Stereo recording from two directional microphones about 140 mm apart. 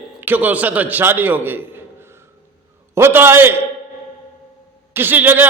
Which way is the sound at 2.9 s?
15° right (ahead or behind).